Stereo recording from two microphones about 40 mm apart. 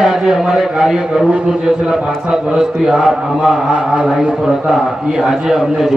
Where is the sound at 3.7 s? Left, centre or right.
Right.